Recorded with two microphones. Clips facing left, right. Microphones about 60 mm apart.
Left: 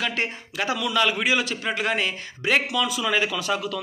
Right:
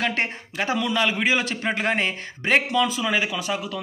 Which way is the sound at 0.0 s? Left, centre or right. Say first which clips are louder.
Right 2 dB; right.